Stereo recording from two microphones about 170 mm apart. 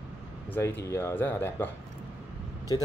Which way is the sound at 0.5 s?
15° left (ahead or behind).